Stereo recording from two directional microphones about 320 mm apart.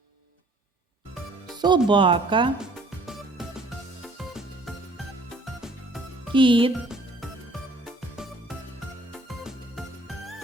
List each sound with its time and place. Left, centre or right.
1.5 s speech: centre
4.2 s music: centre
6.3 s speech: centre
6.8 s music: centre